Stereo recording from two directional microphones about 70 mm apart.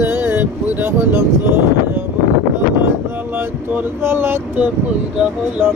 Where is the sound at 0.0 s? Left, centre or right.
Right.